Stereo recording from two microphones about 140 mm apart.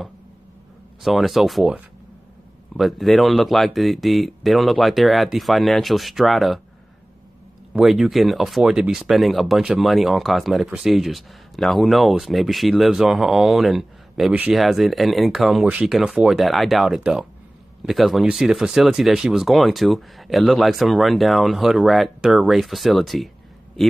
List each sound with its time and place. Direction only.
1.0 s speech: centre (ahead or behind)
2.8 s speech: centre (ahead or behind)
7.7 s speech: centre (ahead or behind)